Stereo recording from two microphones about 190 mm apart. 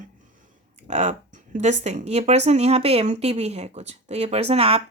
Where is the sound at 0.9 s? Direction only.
35° right (ahead or behind).